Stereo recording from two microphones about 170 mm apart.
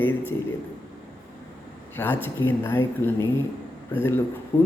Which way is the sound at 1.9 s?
10° left (ahead or behind).